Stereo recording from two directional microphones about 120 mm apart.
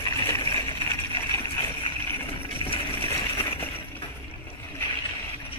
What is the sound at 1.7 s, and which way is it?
Vehicle, 50° left (ahead or behind).